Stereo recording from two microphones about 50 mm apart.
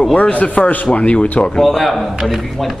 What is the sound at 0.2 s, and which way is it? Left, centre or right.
A man's voice, left.